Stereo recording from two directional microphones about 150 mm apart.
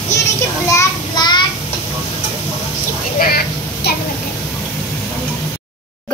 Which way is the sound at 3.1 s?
80° left.